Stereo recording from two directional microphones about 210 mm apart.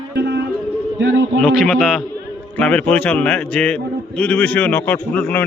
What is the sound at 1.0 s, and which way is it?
Speech, 65° right (ahead or behind).